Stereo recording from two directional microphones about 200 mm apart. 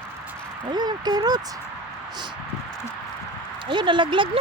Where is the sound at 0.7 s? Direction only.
20° right (ahead or behind).